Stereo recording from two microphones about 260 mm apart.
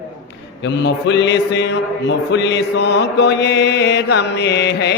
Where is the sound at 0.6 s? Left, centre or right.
Left.